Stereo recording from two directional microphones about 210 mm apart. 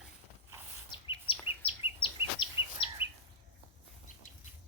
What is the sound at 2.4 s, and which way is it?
Bird vocalization, 20° left (ahead or behind).